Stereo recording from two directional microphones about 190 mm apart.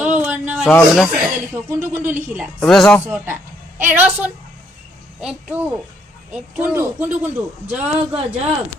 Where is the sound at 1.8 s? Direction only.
10° right (ahead or behind).